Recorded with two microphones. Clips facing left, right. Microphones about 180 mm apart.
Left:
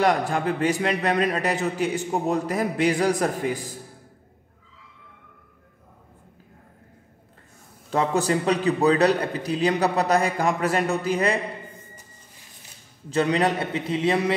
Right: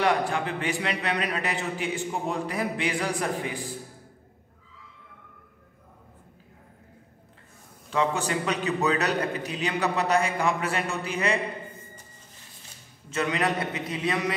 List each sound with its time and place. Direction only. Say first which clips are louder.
0.0 s a man's voice: left 3 dB; 40° left (ahead or behind)
7.9 s a man's voice: left 4 dB; 40° left (ahead or behind)
13.1 s a man's voice: left 5 dB; 30° left (ahead or behind)